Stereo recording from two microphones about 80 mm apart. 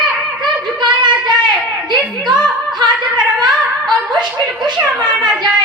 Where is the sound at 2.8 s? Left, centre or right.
Right.